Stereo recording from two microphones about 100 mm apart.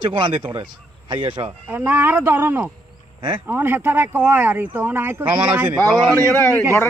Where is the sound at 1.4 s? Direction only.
20° right (ahead or behind).